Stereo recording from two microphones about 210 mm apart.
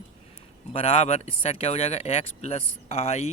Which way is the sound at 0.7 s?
30° left (ahead or behind).